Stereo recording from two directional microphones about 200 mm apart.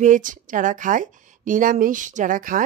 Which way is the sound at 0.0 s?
40° right (ahead or behind).